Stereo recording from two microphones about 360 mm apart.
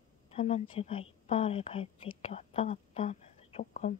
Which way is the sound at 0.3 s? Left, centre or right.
Centre.